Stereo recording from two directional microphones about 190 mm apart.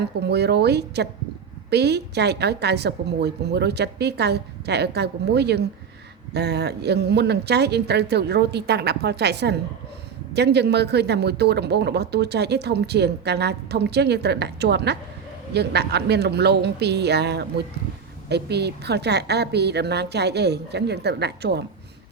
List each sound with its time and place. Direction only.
0.0 s speech: 60° right (ahead or behind)